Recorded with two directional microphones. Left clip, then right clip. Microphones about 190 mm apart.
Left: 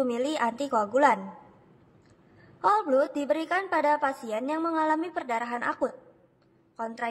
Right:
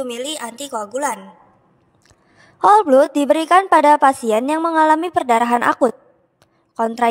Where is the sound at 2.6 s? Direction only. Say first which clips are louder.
Right 12 dB; 50° right (ahead or behind).